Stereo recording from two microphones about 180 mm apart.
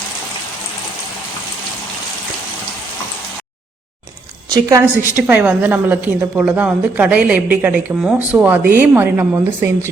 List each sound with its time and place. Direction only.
4.4 s a woman's voice: 20° right (ahead or behind)